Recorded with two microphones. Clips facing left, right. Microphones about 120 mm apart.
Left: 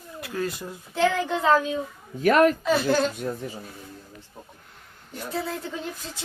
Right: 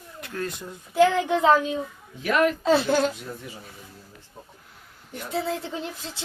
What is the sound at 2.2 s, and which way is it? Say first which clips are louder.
Speech: left 4 dB; 40° left (ahead or behind).